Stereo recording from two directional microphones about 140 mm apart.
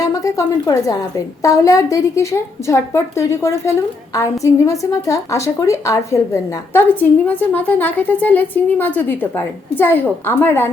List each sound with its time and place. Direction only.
0.0 s a woman's voice: 25° left (ahead or behind)